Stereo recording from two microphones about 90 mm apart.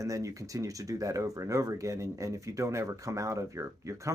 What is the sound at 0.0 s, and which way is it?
Speech, 35° right (ahead or behind).